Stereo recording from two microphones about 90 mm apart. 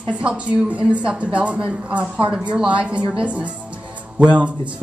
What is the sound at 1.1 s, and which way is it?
Speech, 10° right (ahead or behind).